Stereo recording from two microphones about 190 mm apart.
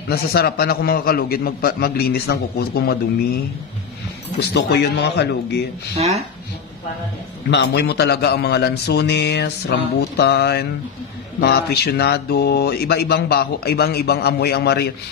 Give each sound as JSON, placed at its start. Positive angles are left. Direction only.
{"t": 0.1, "sound": "speech", "side_deg": 55}
{"t": 4.4, "sound": "speech", "side_deg": 60}
{"t": 5.9, "sound": "speech", "side_deg": -35}
{"t": 7.5, "sound": "speech", "side_deg": 60}